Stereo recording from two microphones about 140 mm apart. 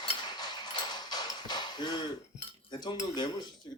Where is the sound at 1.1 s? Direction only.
30° left (ahead or behind).